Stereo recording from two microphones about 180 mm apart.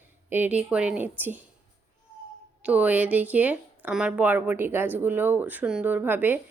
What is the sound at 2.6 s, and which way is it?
Speech, 10° right (ahead or behind).